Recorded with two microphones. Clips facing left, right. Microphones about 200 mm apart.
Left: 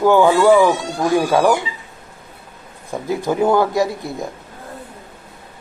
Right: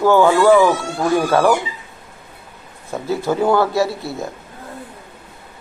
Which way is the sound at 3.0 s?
15° left (ahead or behind).